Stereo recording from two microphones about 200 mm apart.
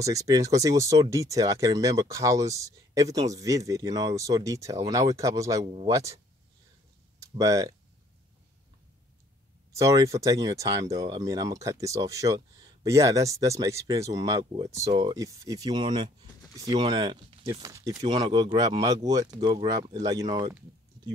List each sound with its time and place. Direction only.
0.0 s speech: 15° right (ahead or behind)
5.7 s speech: 25° right (ahead or behind)
7.2 s speech: 15° right (ahead or behind)
9.7 s speech: 15° right (ahead or behind)